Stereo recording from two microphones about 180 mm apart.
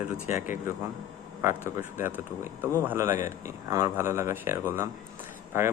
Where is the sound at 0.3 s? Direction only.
45° left (ahead or behind).